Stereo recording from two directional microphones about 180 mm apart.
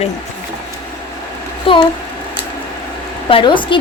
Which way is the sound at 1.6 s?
30° left (ahead or behind).